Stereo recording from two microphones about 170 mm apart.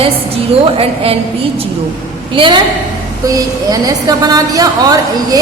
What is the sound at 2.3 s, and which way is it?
A woman's voice, 30° right (ahead or behind).